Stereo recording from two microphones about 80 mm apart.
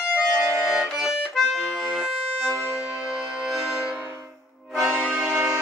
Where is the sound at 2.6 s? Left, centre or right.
Right.